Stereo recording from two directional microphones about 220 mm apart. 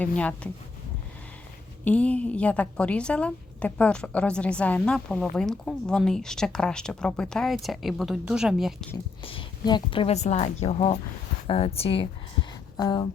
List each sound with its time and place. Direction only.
0.2 s a woman's voice: 5° left (ahead or behind)
1.8 s a woman's voice: 5° left (ahead or behind)
9.2 s a woman's voice: 20° left (ahead or behind)